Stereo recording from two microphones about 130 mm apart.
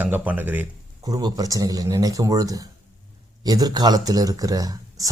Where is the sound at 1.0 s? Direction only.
30° right (ahead or behind).